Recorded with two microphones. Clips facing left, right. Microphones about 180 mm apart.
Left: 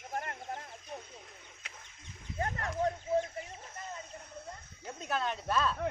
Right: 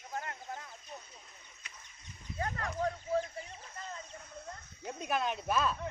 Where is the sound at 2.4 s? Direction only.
25° left (ahead or behind).